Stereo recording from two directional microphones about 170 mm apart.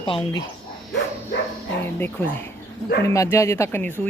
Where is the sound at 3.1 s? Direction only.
15° left (ahead or behind).